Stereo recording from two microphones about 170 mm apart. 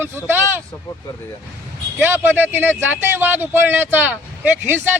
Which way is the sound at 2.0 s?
10° right (ahead or behind).